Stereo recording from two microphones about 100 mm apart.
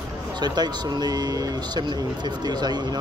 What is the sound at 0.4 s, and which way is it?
Speech, 45° right (ahead or behind).